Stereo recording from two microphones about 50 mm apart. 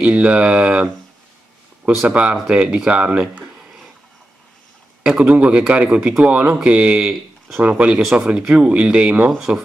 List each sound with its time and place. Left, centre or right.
0.0 s speech: right
2.0 s speech: right
5.0 s speech: right
7.1 s a sound: centre
7.6 s speech: right